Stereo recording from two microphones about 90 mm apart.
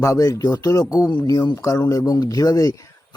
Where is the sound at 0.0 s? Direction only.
40° left (ahead or behind).